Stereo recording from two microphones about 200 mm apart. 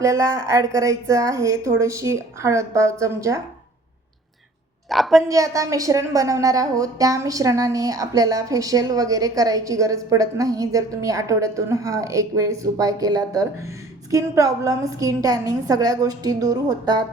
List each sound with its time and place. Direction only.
0.0 s a woman's voice: 15° right (ahead or behind)
4.9 s a woman's voice: centre (ahead or behind)
5.3 s a woman's voice: 15° right (ahead or behind)